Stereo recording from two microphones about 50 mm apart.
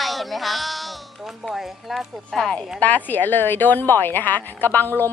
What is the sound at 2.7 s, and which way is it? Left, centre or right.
A woman's voice, left.